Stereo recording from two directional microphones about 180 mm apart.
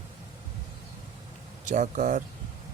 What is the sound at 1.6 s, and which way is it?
Speech, 45° right (ahead or behind).